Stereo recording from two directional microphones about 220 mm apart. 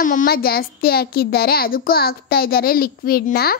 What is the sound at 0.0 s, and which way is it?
A child's voice, 40° left (ahead or behind).